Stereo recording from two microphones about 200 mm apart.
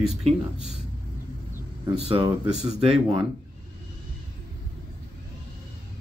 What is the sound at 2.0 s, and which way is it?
Speech, 30° right (ahead or behind).